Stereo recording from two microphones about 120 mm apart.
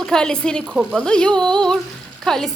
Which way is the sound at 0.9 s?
5° left (ahead or behind).